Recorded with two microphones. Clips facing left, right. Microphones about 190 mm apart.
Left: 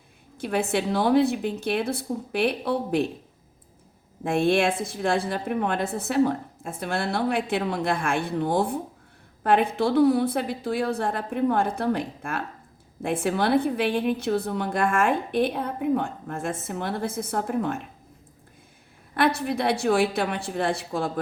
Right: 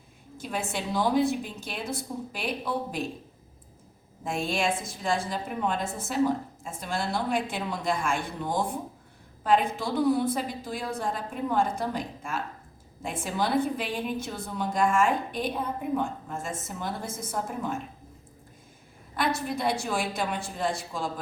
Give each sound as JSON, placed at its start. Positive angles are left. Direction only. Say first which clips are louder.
{"t": 0.3, "sound": "a woman's voice", "louder": "left 8 dB", "side_deg": 65}
{"t": 4.2, "sound": "a woman's voice", "louder": "left 7 dB", "side_deg": 65}
{"t": 19.1, "sound": "a woman's voice", "louder": "left 5 dB", "side_deg": 65}